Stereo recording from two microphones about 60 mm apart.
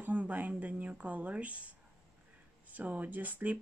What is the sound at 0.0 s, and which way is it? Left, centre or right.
Speech, right.